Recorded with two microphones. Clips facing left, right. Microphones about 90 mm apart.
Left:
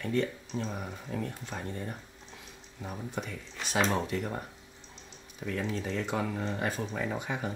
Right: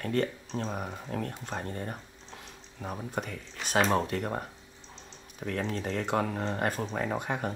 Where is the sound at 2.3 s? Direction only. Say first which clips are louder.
Right 5 dB; 50° right (ahead or behind).